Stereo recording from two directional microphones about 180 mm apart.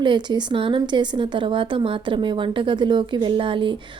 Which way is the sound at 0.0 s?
25° right (ahead or behind).